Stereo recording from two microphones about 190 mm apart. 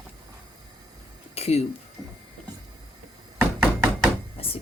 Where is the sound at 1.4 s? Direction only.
35° left (ahead or behind).